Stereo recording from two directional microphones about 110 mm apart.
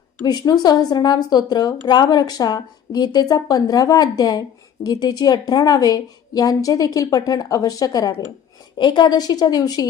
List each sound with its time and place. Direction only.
0.6 s a woman's voice: 35° left (ahead or behind)